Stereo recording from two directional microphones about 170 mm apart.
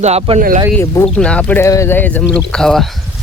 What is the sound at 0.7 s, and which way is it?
Speech, 10° left (ahead or behind).